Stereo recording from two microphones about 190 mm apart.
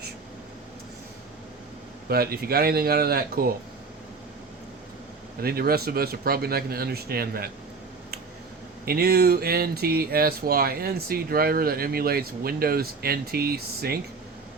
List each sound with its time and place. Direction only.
2.0 s speech: 55° right (ahead or behind)
5.4 s speech: 55° right (ahead or behind)
8.8 s speech: 55° right (ahead or behind)